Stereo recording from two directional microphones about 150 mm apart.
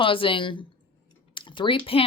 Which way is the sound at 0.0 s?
35° left (ahead or behind).